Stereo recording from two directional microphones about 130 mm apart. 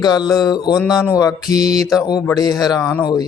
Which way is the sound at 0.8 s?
5° right (ahead or behind).